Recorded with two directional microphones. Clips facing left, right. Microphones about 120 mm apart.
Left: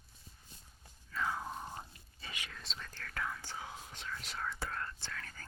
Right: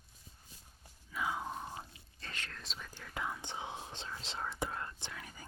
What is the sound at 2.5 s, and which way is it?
Whispering, centre (ahead or behind).